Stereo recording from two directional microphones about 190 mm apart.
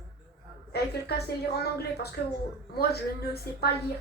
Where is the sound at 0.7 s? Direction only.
60° left (ahead or behind).